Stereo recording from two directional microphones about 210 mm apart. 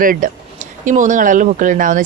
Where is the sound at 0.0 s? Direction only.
40° right (ahead or behind).